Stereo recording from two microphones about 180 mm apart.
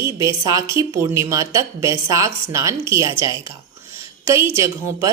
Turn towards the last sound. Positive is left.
turn(degrees=-15)  # may be behind; listen again after turning